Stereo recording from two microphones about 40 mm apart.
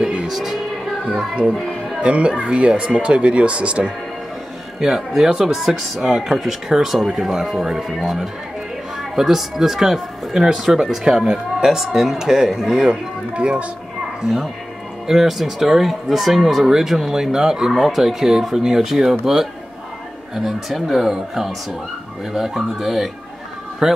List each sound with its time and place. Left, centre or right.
0.3 s a sound: centre
1.0 s speech: right
1.4 s music: centre
2.0 s speech: right
4.7 s speech: centre
13.3 s speech: right
15.0 s speech: centre
20.3 s speech: centre